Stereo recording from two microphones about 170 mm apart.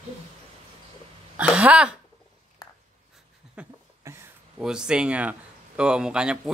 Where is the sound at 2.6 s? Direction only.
20° left (ahead or behind).